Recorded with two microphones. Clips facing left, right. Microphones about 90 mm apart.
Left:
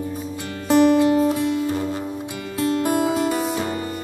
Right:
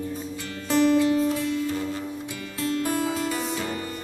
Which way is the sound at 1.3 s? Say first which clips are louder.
Left 5 dB; 20° left (ahead or behind).